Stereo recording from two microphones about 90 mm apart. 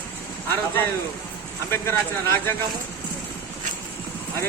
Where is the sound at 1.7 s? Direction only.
30° left (ahead or behind).